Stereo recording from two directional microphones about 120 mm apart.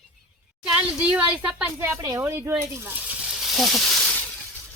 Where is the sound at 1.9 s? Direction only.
30° right (ahead or behind).